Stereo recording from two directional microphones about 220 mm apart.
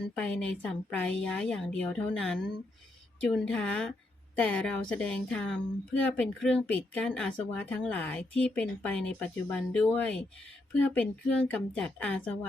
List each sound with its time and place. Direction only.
0.3 s a woman's voice: 5° left (ahead or behind)